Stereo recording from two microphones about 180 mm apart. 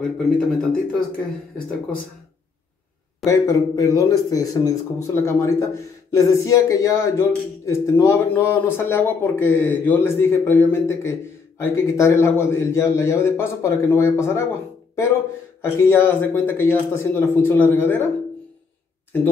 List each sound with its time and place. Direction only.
0.4 s speech: 5° left (ahead or behind)
3.3 s speech: 15° left (ahead or behind)
15.6 s speech: 15° left (ahead or behind)